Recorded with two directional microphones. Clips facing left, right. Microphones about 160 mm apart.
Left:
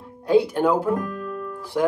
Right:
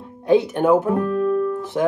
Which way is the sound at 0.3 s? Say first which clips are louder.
Right 3 dB; 20° right (ahead or behind).